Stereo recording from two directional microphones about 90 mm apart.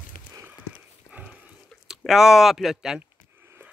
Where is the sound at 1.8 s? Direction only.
5° right (ahead or behind).